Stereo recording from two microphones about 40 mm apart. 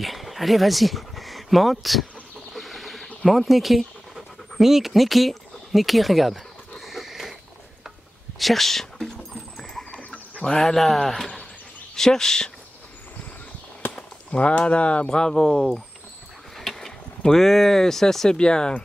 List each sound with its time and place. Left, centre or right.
0.0 s speech: centre
2.5 s a sound: centre
3.2 s speech: centre
6.8 s dog: centre
8.4 s speech: centre
9.0 s a sound: centre
9.8 s goat: left
10.4 s speech: centre
14.6 s speech: left
15.1 s speech: centre
16.5 s a sound: centre
17.2 s speech: centre